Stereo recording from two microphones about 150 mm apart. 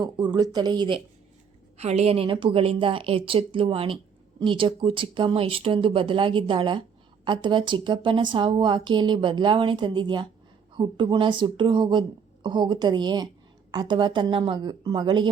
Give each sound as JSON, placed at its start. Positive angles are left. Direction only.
{"t": 0.0, "sound": "speech", "side_deg": -25}
{"t": 1.8, "sound": "a woman's voice", "side_deg": -45}